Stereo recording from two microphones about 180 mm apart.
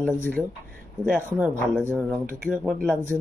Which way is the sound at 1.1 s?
10° right (ahead or behind).